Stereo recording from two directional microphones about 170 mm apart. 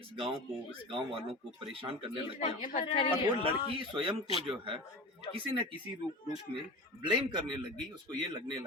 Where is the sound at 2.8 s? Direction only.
30° left (ahead or behind).